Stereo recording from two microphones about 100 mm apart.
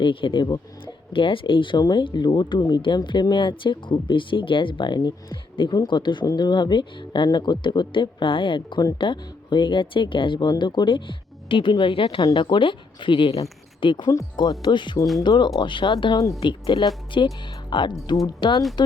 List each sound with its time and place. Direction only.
0.0 s speech: 60° left (ahead or behind)
1.1 s speech: 60° left (ahead or behind)
8.8 s speech: 40° left (ahead or behind)
9.0 s speech: 55° left (ahead or behind)